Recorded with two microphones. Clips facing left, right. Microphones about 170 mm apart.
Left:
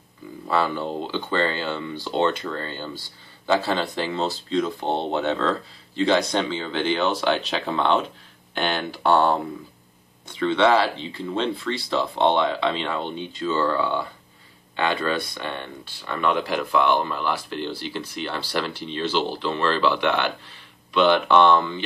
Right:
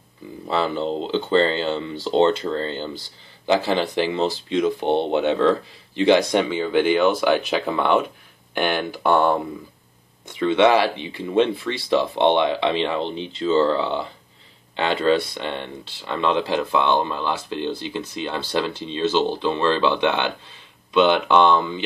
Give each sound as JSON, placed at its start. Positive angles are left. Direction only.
{"t": 0.5, "sound": "speech", "side_deg": -25}
{"t": 10.3, "sound": "speech", "side_deg": -15}